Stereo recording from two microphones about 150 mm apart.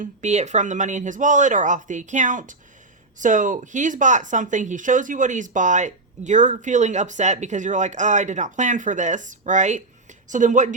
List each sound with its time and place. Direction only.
0.0 s speech: 50° right (ahead or behind)